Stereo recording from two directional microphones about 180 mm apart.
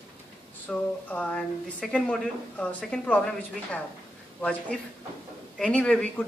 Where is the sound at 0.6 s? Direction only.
5° left (ahead or behind).